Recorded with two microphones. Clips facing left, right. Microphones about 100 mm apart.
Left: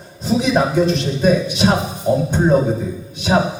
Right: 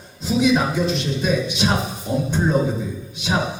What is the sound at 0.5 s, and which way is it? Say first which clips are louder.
A man's voice: left 4 dB; 45° left (ahead or behind).